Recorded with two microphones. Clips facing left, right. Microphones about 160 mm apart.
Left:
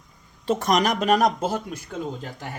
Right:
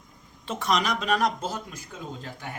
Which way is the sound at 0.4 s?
40° left (ahead or behind).